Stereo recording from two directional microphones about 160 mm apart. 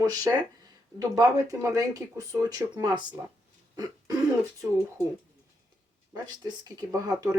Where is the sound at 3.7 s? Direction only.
25° right (ahead or behind).